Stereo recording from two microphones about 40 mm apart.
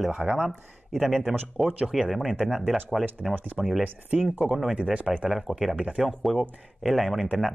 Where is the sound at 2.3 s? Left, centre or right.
Centre.